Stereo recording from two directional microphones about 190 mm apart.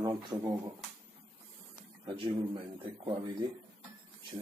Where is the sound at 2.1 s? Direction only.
25° right (ahead or behind).